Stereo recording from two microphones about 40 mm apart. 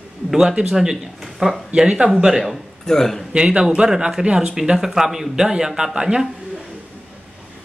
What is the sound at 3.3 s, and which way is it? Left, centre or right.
Speech, right.